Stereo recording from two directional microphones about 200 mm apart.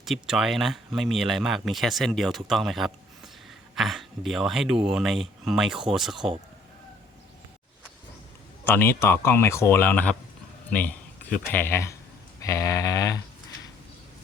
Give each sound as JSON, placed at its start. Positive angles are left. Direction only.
{"t": 0.0, "sound": "speech", "side_deg": 0}
{"t": 8.6, "sound": "speech", "side_deg": 10}